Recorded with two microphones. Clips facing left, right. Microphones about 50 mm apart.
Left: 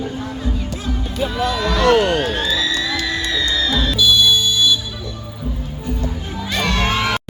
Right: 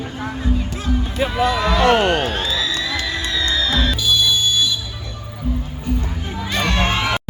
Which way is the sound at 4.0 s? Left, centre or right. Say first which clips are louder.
Left 3 dB; right.